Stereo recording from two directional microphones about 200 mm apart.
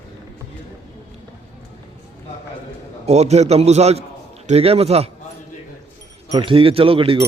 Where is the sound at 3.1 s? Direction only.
35° right (ahead or behind).